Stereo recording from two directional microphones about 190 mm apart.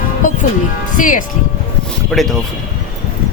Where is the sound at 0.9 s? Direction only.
45° left (ahead or behind).